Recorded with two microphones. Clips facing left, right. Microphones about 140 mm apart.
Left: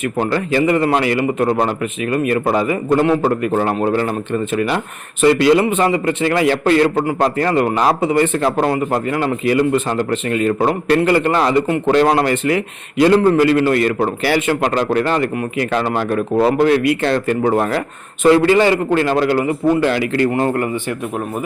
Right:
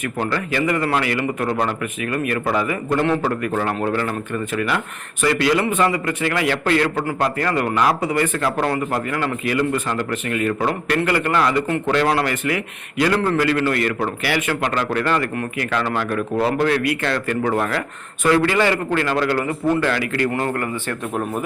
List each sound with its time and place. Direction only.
0.0 s a man's voice: 25° left (ahead or behind)